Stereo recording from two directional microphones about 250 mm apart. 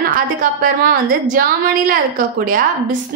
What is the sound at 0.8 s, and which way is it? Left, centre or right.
A woman's voice, right.